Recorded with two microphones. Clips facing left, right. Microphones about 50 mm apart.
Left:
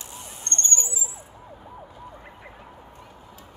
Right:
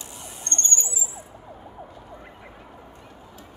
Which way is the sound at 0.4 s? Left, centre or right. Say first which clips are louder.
Even; left.